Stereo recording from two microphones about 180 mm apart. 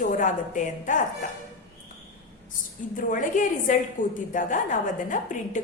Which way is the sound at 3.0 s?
45° left (ahead or behind).